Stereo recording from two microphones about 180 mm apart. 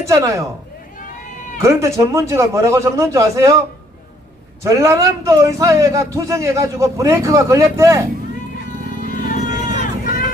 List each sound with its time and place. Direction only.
0.0 s a man's voice: 15° right (ahead or behind)
1.6 s a man's voice: 15° right (ahead or behind)
4.6 s a man's voice: 15° right (ahead or behind)
9.0 s a sound: 50° left (ahead or behind)